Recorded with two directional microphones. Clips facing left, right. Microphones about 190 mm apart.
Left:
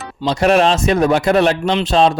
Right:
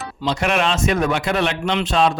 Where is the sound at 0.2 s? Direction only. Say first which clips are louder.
Left 7 dB; 35° left (ahead or behind).